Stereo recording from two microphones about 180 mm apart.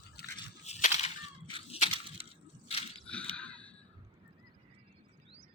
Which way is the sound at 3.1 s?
5° left (ahead or behind).